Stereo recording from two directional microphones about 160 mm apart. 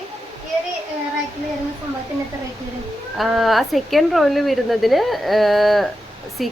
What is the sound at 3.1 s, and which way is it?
A woman's voice, centre (ahead or behind).